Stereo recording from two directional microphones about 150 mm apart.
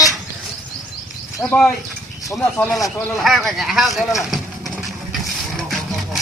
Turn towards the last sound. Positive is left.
turn(degrees=0)  # may be behind; listen again after turning